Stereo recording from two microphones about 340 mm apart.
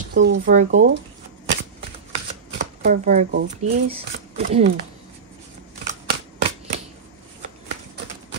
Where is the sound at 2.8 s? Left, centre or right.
Right.